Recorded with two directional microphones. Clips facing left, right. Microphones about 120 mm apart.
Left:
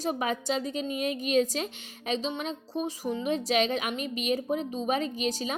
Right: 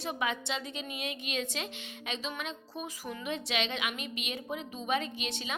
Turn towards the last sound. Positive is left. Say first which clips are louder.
# left 8 dB
turn(degrees=40)  # may be behind; listen again after turning